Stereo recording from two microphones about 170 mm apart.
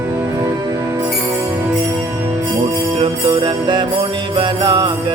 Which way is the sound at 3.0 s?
30° right (ahead or behind).